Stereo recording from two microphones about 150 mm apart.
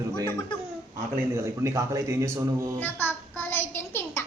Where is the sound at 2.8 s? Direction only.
15° left (ahead or behind).